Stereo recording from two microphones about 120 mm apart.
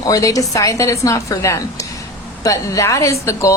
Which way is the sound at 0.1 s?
30° left (ahead or behind).